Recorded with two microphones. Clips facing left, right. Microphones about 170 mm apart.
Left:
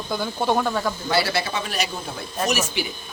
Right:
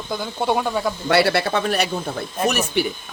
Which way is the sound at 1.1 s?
65° right (ahead or behind).